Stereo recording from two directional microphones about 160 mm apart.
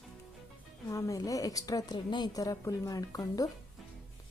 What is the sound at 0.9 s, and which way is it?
Speech, 20° left (ahead or behind).